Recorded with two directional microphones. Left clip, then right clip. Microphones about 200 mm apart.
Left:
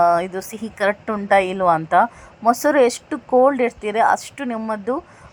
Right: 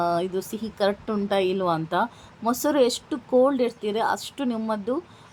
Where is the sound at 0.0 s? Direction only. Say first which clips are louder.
Left 8 dB; 15° left (ahead or behind).